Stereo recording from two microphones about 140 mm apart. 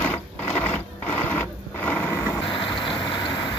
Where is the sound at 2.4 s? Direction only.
35° left (ahead or behind).